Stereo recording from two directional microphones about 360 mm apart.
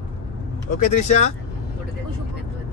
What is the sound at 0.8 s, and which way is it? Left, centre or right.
Speech, centre.